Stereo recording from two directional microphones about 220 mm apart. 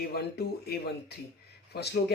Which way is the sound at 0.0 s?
45° left (ahead or behind).